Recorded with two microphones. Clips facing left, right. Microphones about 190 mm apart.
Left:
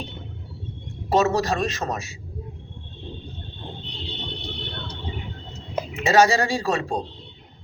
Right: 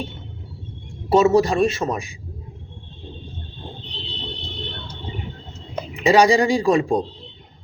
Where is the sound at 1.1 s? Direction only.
10° right (ahead or behind).